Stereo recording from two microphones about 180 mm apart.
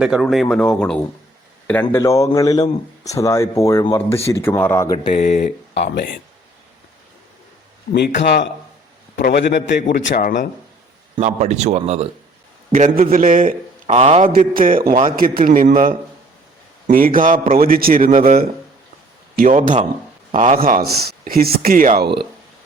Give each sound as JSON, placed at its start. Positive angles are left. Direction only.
{"t": 0.0, "sound": "speech", "side_deg": 0}
{"t": 5.1, "sound": "speech", "side_deg": 40}
{"t": 5.7, "sound": "a man's voice", "side_deg": 70}
{"t": 7.9, "sound": "a man's voice", "side_deg": 65}
{"t": 11.2, "sound": "speech", "side_deg": -40}
{"t": 12.7, "sound": "a man's voice", "side_deg": -45}